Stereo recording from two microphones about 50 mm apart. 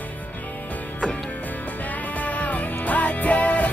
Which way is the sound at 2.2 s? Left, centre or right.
Left.